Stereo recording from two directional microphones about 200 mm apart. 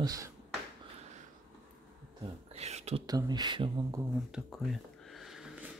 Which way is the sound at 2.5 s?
30° right (ahead or behind).